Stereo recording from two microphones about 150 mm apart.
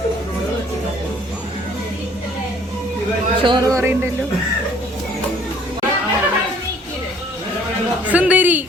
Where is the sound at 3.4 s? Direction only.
25° right (ahead or behind).